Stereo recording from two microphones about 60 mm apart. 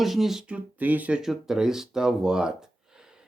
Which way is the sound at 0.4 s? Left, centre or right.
Right.